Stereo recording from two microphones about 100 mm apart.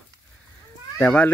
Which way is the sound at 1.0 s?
15° left (ahead or behind).